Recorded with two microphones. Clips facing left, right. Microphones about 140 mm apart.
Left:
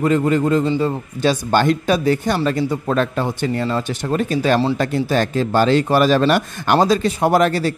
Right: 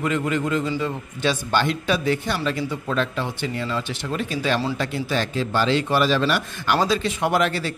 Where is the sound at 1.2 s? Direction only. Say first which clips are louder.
Left 5 dB; 45° left (ahead or behind).